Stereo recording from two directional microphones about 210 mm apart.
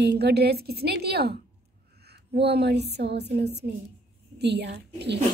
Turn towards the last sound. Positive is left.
turn(degrees=-50)  # may be behind; listen again after turning